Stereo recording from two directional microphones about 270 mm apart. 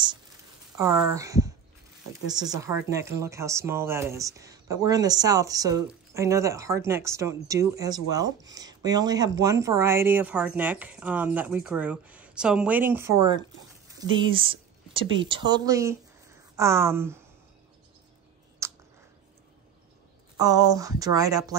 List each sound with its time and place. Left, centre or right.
0.7 s speech: centre
2.5 s speech: centre
14.3 s a sound: centre
15.2 s speech: centre
18.6 s a sound: centre
20.3 s speech: centre